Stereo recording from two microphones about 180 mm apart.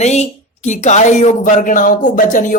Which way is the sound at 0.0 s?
40° left (ahead or behind).